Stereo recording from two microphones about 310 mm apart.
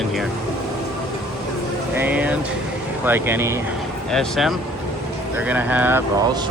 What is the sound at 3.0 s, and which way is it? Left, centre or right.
Speech, centre.